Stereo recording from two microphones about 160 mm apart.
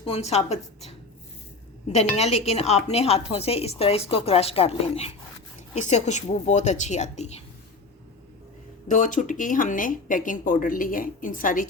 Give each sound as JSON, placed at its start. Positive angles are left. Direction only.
{"t": 0.0, "sound": "a woman's voice", "side_deg": 40}
{"t": 8.9, "sound": "speech", "side_deg": 50}